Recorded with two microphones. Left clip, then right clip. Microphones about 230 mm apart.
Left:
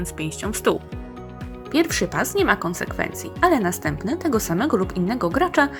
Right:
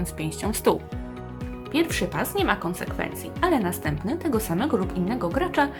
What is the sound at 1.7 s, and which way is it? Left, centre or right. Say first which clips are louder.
Speech: left 4 dB; left.